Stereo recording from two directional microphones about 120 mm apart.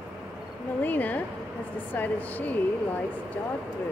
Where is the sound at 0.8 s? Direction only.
15° left (ahead or behind).